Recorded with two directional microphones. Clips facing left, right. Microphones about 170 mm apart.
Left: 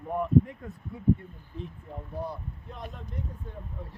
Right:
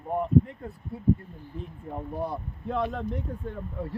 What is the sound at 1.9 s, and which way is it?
Speech, 60° right (ahead or behind).